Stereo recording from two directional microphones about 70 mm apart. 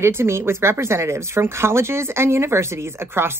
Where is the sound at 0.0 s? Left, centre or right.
Right.